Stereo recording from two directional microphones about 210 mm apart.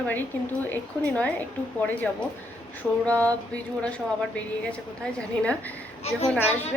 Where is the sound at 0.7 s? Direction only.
5° left (ahead or behind).